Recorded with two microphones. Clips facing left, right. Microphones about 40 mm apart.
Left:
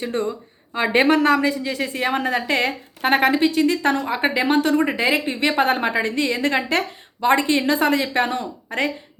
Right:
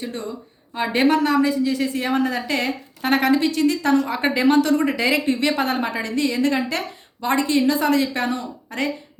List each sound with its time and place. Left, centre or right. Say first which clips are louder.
0.0 s a woman's voice: left 5 dB; left
4.0 s a woman's voice: right 1 dB; left